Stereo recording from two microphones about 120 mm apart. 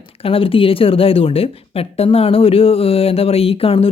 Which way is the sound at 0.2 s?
50° left (ahead or behind).